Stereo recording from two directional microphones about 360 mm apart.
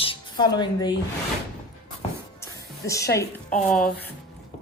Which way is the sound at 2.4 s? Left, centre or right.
Centre.